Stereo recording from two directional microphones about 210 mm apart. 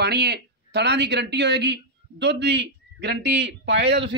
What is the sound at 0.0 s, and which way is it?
Speech, 50° right (ahead or behind).